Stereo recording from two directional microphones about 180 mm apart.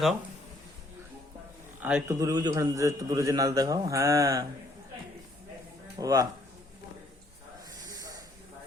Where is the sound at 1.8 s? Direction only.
5° right (ahead or behind).